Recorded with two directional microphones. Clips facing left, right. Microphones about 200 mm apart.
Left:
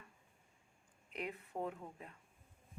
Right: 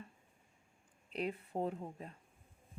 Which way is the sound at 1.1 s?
30° right (ahead or behind).